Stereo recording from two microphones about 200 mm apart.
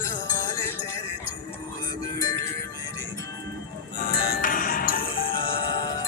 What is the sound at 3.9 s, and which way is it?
Music, 45° left (ahead or behind).